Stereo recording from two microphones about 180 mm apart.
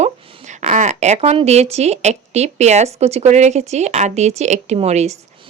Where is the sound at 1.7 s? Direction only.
35° right (ahead or behind).